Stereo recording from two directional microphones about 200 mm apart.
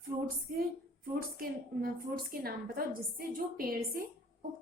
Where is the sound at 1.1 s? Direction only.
45° right (ahead or behind).